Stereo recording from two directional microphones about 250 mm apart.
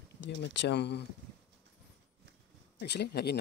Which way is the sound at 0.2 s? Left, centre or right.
Left.